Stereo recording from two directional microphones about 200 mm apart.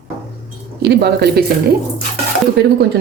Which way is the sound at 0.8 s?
55° right (ahead or behind).